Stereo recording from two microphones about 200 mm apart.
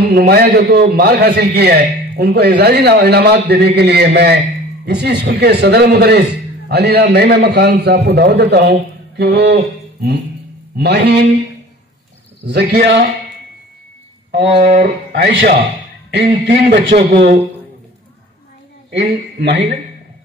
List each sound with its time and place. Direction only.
0.1 s a man's voice: 50° right (ahead or behind)
9.1 s mantra: 55° right (ahead or behind)
10.8 s a man's voice: 55° right (ahead or behind)
12.4 s a man's voice: 55° right (ahead or behind)
14.3 s a sound: 60° right (ahead or behind)
14.6 s speech: 40° right (ahead or behind)
15.1 s a man's voice: 55° right (ahead or behind)
18.9 s speech: 55° right (ahead or behind)